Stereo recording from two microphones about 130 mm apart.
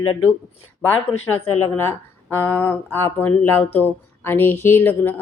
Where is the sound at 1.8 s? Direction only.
20° left (ahead or behind).